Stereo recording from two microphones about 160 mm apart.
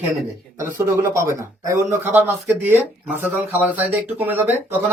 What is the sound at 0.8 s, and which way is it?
A man's voice, 15° right (ahead or behind).